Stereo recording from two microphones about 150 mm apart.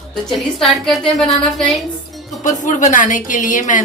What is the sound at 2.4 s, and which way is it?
A woman's voice, 60° left (ahead or behind).